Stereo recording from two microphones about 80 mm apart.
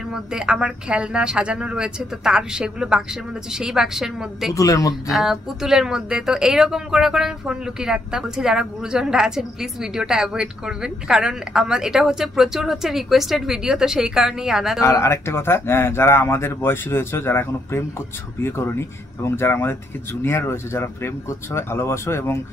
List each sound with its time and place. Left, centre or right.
0.1 s a woman's voice: centre
4.6 s speech: left
5.1 s a woman's voice: centre
14.8 s speech: left